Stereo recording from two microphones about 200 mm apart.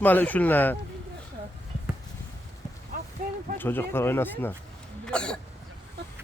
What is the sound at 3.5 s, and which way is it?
Speech, 10° left (ahead or behind).